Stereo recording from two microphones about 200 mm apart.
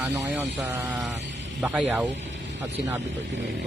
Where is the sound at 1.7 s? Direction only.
5° right (ahead or behind).